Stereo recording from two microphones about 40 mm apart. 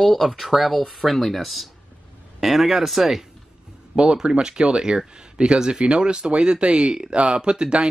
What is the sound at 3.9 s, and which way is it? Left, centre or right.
Speech, right.